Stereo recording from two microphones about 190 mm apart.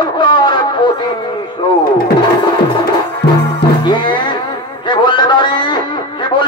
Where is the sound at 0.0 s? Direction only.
25° left (ahead or behind).